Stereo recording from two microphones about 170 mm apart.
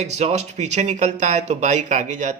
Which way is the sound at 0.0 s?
40° right (ahead or behind).